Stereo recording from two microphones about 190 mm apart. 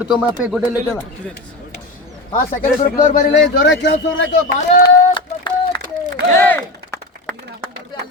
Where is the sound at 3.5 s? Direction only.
65° left (ahead or behind).